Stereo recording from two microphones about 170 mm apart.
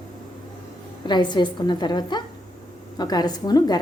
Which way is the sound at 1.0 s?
25° left (ahead or behind).